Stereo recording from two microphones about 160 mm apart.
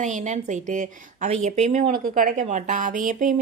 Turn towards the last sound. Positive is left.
turn(degrees=-55)  # may be behind; listen again after turning